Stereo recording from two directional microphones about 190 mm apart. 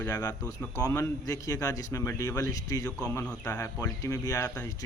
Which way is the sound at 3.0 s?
10° left (ahead or behind).